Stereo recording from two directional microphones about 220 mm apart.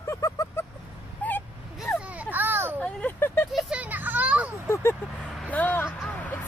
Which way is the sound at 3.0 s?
5° left (ahead or behind).